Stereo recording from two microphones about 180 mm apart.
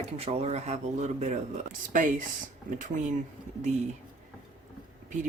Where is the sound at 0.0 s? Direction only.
35° right (ahead or behind).